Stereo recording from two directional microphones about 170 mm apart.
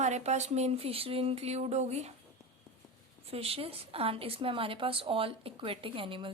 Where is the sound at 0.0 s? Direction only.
40° right (ahead or behind).